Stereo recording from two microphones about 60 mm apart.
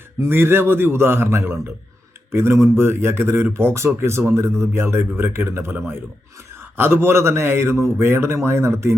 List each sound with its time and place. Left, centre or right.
0.2 s a man's voice: right